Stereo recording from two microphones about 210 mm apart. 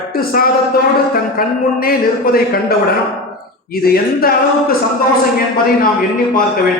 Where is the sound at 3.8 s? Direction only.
45° left (ahead or behind).